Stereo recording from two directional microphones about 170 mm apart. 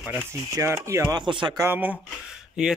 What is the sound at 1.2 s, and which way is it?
Speech, 30° right (ahead or behind).